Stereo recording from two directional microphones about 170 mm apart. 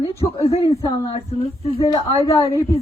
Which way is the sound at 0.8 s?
25° left (ahead or behind).